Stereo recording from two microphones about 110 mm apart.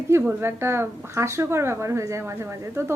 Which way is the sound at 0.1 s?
20° right (ahead or behind).